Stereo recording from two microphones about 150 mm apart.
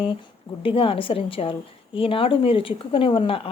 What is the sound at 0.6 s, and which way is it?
Speech, 35° left (ahead or behind).